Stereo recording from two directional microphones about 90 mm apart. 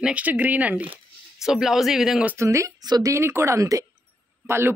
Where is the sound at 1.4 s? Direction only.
5° right (ahead or behind).